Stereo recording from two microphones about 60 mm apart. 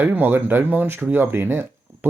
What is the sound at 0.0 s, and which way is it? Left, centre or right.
Speech, right.